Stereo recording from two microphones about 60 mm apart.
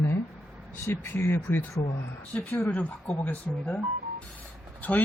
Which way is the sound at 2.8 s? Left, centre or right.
Left.